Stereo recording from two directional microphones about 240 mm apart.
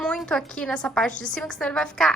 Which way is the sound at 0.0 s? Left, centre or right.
Centre.